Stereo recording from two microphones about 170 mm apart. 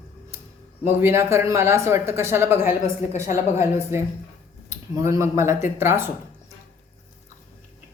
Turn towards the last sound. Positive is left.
turn(degrees=-15)  # may be behind; listen again after turning